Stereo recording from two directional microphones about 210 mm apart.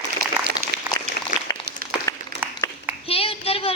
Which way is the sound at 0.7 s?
50° right (ahead or behind).